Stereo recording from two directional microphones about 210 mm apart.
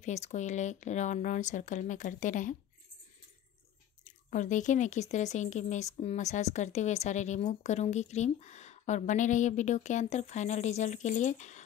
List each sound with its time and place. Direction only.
0.0 s speech: 35° left (ahead or behind)
4.0 s speech: 35° left (ahead or behind)